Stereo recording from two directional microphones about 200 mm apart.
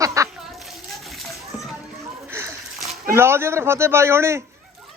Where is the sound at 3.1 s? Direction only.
10° right (ahead or behind).